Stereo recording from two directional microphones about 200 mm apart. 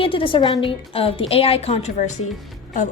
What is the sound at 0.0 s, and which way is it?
Speech, 25° left (ahead or behind).